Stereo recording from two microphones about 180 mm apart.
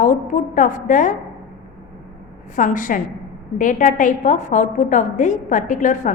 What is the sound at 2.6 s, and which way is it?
A woman's voice, 45° left (ahead or behind).